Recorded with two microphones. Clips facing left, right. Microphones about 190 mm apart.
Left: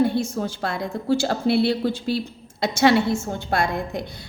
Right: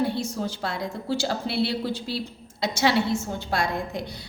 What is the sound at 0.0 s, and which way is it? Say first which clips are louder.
A woman's voice: left 5 dB; 50° left (ahead or behind).